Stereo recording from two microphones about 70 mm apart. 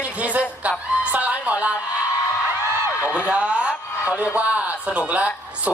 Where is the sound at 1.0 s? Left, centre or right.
Centre.